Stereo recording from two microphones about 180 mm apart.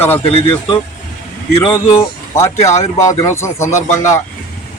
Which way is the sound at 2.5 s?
40° left (ahead or behind).